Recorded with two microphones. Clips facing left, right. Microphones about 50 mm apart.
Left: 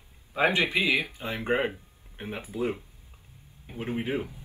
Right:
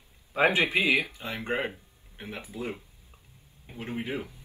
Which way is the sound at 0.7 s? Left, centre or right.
Right.